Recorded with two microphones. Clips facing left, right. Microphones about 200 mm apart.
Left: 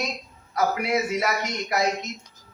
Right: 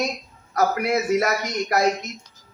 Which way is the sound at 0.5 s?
45° right (ahead or behind).